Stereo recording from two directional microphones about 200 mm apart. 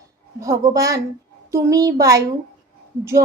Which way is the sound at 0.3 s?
15° right (ahead or behind).